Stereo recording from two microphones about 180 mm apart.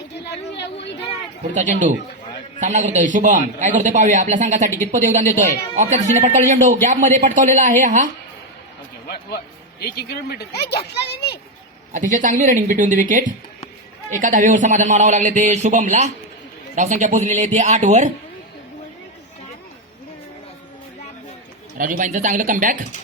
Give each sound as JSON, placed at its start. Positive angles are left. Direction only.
{"t": 0.3, "sound": "a sound", "side_deg": 70}
{"t": 1.5, "sound": "a man's voice", "side_deg": -45}
{"t": 9.8, "sound": "speech", "side_deg": 60}
{"t": 11.9, "sound": "a man's voice", "side_deg": -45}
{"t": 21.8, "sound": "a man's voice", "side_deg": -50}